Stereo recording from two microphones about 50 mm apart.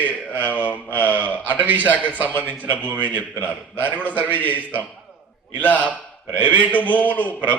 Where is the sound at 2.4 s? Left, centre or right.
Left.